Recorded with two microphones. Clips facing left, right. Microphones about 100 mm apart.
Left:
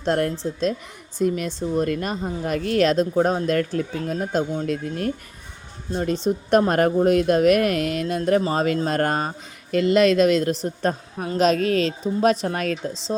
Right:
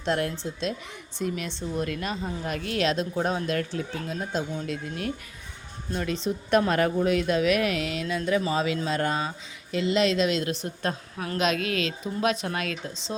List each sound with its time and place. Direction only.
0.0 s a woman's voice: 45° left (ahead or behind)
6.2 s a woman's voice: 40° left (ahead or behind)